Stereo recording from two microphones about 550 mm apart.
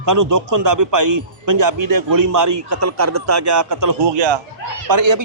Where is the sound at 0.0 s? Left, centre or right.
Right.